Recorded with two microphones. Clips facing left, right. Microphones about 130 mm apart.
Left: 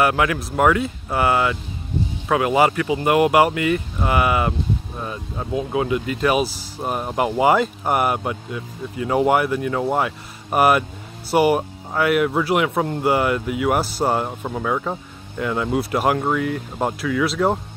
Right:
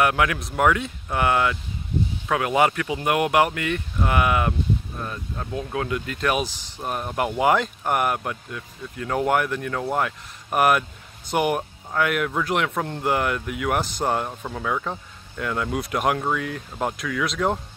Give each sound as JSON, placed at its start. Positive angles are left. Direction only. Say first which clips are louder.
{"t": 0.0, "sound": "speech", "louder": "left 2 dB", "side_deg": 0}
{"t": 6.8, "sound": "speech", "louder": "left 4 dB", "side_deg": 25}
{"t": 7.2, "sound": "speech", "louder": "left 3 dB", "side_deg": 5}